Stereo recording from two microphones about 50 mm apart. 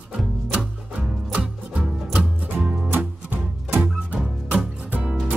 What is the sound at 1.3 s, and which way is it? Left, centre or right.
Music, right.